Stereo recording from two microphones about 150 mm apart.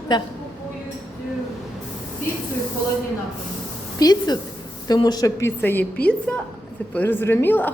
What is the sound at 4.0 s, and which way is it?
A woman's voice, 25° left (ahead or behind).